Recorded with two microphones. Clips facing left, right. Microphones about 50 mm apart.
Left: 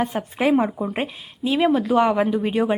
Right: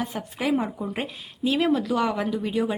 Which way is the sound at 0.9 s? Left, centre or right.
Left.